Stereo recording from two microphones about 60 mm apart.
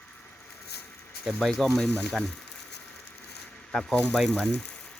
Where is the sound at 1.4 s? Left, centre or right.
Centre.